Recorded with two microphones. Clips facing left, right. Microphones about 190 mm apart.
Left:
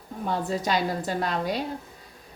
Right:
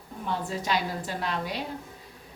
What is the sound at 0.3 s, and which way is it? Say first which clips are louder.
A woman's voice: left 3 dB; 40° left (ahead or behind).